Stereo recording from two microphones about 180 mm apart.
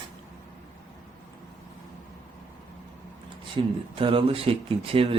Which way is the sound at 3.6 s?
30° right (ahead or behind).